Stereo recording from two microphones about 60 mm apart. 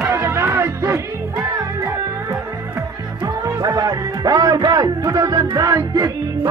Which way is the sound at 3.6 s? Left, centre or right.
Right.